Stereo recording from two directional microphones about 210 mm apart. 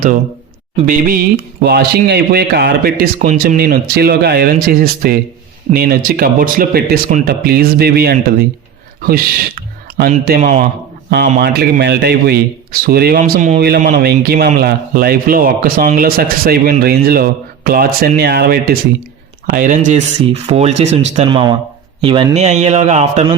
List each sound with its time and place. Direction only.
0.9 s a man's voice: 40° right (ahead or behind)
9.0 s a sound: 45° right (ahead or behind)
10.1 s speech: 35° right (ahead or behind)
11.3 s a man's voice: 50° right (ahead or behind); by 23.3 s 30° right (ahead or behind)